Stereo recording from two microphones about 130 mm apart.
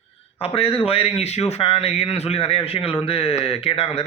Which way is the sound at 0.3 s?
50° left (ahead or behind).